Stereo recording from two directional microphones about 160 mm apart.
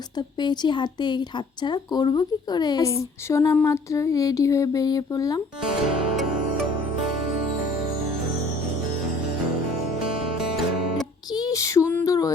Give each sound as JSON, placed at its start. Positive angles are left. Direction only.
{"t": 0.2, "sound": "speech", "side_deg": 25}
{"t": 11.3, "sound": "child singing", "side_deg": 20}